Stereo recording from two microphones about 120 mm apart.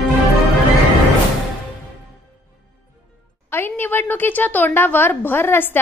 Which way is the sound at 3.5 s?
20° left (ahead or behind).